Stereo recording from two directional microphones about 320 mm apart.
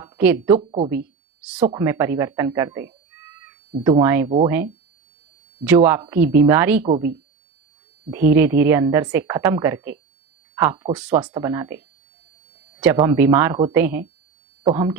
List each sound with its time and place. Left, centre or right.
0.0 s speech: centre
0.6 s a woman's voice: centre
8.1 s a woman's voice: centre
12.8 s a woman's voice: centre